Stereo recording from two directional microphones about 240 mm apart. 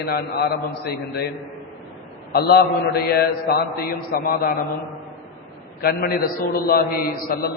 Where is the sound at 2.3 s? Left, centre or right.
Left.